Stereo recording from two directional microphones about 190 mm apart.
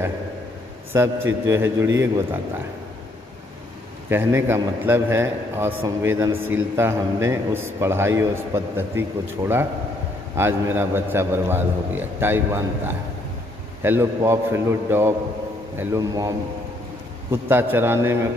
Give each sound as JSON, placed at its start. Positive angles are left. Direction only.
{"t": 0.9, "sound": "a man's voice", "side_deg": -20}
{"t": 4.1, "sound": "a man's voice", "side_deg": -10}